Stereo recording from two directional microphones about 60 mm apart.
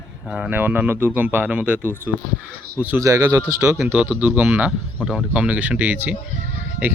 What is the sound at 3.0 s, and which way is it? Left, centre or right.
Speech, right.